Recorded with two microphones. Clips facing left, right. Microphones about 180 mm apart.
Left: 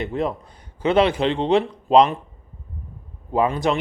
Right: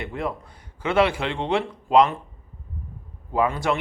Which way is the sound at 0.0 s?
20° left (ahead or behind).